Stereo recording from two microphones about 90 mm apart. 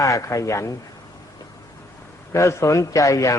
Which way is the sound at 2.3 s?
35° left (ahead or behind).